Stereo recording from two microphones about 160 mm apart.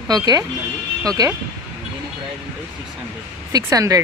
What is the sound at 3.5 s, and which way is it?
Speech, 20° right (ahead or behind).